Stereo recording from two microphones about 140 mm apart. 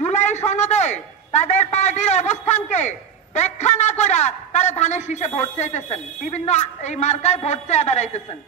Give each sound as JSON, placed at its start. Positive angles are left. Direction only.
{"t": 0.0, "sound": "a man's voice", "side_deg": 55}